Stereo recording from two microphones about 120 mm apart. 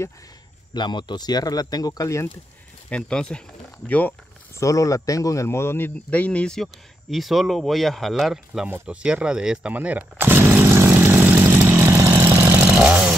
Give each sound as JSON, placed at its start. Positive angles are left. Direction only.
{"t": 0.7, "sound": "speech", "side_deg": 40}
{"t": 2.9, "sound": "speech", "side_deg": 5}
{"t": 4.6, "sound": "speech", "side_deg": 25}
{"t": 6.0, "sound": "speech", "side_deg": 10}
{"t": 8.6, "sound": "a sound", "side_deg": -10}